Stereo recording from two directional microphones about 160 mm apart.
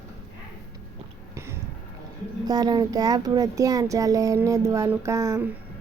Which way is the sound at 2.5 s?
25° right (ahead or behind).